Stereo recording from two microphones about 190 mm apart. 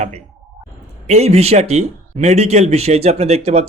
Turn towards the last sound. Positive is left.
turn(degrees=-35)  # may be behind; listen again after turning